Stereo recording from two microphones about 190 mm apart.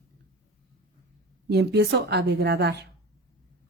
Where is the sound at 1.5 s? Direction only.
60° right (ahead or behind).